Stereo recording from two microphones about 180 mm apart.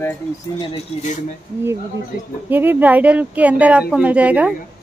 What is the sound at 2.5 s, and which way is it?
Speech, 10° right (ahead or behind).